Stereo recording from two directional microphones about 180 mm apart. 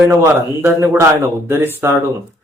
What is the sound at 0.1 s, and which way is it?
Speech, 15° right (ahead or behind).